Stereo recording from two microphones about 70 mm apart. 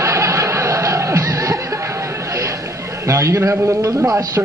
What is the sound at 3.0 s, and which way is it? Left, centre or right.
A man's voice, right.